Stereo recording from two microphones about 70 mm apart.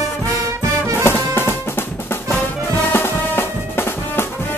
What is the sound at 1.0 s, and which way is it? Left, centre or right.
Music, left.